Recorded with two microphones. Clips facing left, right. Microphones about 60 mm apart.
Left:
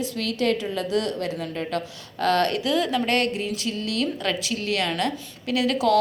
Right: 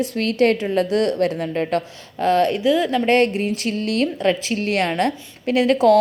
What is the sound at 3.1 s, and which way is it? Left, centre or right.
A woman's voice, right.